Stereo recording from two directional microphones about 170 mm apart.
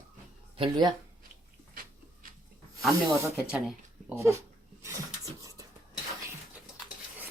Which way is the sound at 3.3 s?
Centre (ahead or behind).